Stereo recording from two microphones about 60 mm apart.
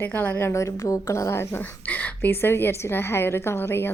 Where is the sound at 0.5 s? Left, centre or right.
Left.